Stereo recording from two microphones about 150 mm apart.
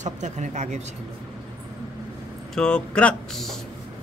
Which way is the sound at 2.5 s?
5° left (ahead or behind).